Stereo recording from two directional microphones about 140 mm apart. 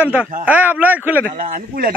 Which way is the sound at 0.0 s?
10° right (ahead or behind).